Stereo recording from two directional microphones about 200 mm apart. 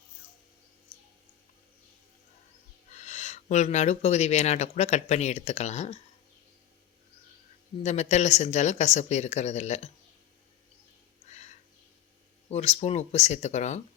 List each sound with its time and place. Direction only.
2.9 s speech: 35° left (ahead or behind)
7.8 s speech: 35° left (ahead or behind)
11.3 s a sound: 35° left (ahead or behind)
12.5 s speech: 30° left (ahead or behind)